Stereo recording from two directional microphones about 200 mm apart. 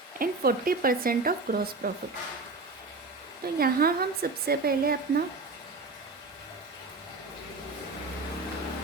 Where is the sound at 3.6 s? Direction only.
50° right (ahead or behind).